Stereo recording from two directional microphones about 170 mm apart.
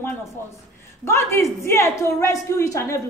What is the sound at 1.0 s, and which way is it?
A woman's voice, 15° left (ahead or behind).